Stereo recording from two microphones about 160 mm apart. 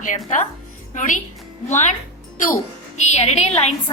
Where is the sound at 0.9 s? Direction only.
55° left (ahead or behind).